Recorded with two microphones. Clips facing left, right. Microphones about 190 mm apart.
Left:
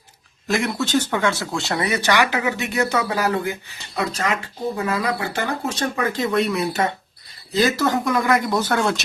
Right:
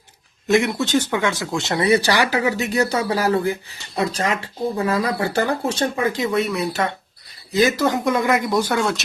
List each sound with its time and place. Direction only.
0.4 s speech: 20° right (ahead or behind)
6.1 s speech: 5° right (ahead or behind)
7.6 s speech: 20° right (ahead or behind)
8.8 s speech: centre (ahead or behind)